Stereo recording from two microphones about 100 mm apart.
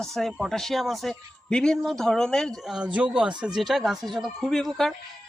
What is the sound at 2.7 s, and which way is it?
A man's voice, 10° right (ahead or behind).